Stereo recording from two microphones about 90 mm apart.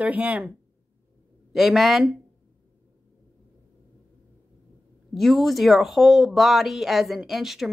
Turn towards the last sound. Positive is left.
turn(degrees=-5)  # may be behind; listen again after turning